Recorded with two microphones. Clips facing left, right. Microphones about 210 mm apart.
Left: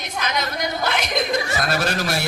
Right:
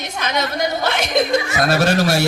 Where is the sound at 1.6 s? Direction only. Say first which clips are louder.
Right 7 dB; 45° right (ahead or behind).